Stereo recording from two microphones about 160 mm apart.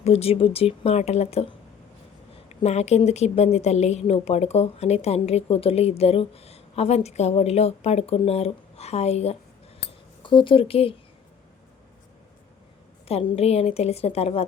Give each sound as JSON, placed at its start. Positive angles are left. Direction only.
{"t": 0.0, "sound": "a woman's voice", "side_deg": 40}
{"t": 13.1, "sound": "a woman's voice", "side_deg": 40}